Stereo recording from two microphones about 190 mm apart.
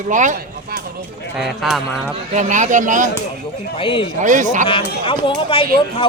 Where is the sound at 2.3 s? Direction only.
40° right (ahead or behind).